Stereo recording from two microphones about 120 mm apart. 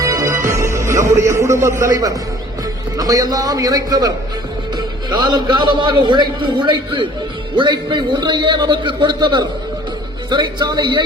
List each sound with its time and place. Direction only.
0.0 s music: 30° right (ahead or behind)
3.0 s a man's voice: 30° right (ahead or behind)